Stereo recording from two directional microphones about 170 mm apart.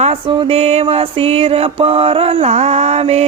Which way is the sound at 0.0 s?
35° right (ahead or behind).